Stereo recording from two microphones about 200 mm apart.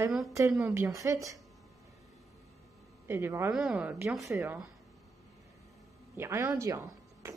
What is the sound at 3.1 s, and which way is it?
Speech, 10° right (ahead or behind).